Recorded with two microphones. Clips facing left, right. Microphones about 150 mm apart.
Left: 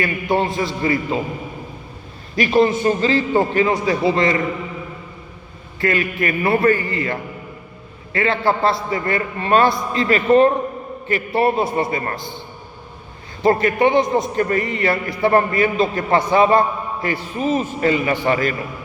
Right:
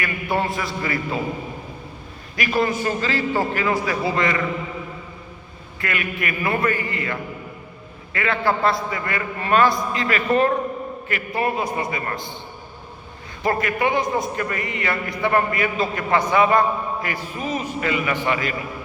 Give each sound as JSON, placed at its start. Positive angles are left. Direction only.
{"t": 0.0, "sound": "a man's voice", "side_deg": 25}
{"t": 2.3, "sound": "a man's voice", "side_deg": 25}
{"t": 5.8, "sound": "a man's voice", "side_deg": 30}
{"t": 13.4, "sound": "a man's voice", "side_deg": 30}
{"t": 14.3, "sound": "a man's voice", "side_deg": 35}